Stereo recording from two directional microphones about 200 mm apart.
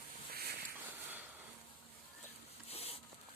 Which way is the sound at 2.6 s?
30° left (ahead or behind).